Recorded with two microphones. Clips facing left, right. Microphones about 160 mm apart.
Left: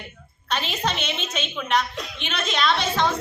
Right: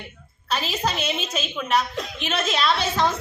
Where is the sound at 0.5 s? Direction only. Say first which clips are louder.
Right 1 dB; 5° right (ahead or behind).